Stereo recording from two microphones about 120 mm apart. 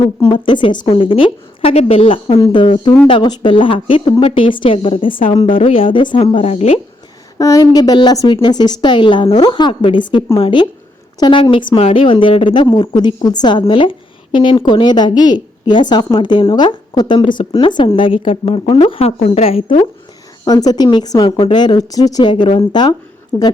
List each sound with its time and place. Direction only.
0.3 s a woman's voice: 40° left (ahead or behind)
0.9 s speech: 50° left (ahead or behind)
6.3 s a woman's voice: 60° left (ahead or behind)
7.3 s a woman's voice: 30° left (ahead or behind)
11.8 s a woman's voice: 55° left (ahead or behind)
20.4 s a woman's voice: 35° left (ahead or behind)
23.3 s a woman's voice: 25° left (ahead or behind)